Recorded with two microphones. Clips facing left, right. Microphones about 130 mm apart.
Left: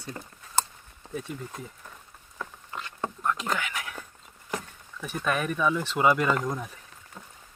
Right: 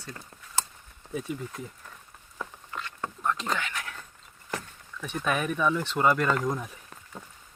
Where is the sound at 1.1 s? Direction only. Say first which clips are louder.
Right 2 dB; centre (ahead or behind).